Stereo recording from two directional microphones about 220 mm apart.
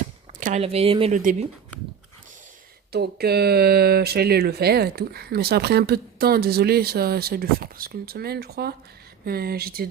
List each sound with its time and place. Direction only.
0.3 s speech: 35° right (ahead or behind)
1.1 s speech: 35° right (ahead or behind)
2.9 s speech: 45° right (ahead or behind)